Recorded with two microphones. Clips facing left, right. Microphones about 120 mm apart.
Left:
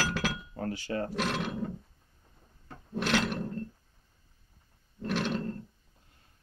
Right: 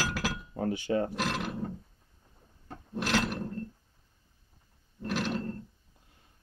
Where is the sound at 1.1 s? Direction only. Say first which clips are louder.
Left 1 dB; centre (ahead or behind).